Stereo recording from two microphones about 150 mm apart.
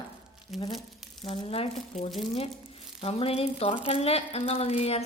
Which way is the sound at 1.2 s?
40° left (ahead or behind).